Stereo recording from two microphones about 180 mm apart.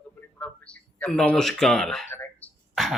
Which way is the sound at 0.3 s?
5° left (ahead or behind).